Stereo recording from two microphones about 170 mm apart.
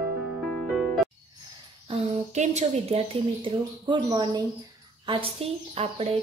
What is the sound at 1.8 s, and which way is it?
Speech, 40° right (ahead or behind).